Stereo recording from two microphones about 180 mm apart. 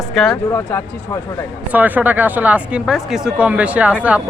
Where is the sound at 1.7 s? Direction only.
10° right (ahead or behind).